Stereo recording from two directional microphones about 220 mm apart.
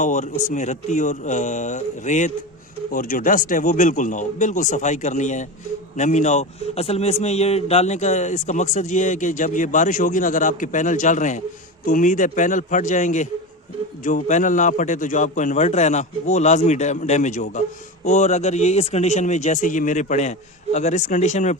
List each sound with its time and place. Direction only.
0.0 s a man's voice: 35° left (ahead or behind)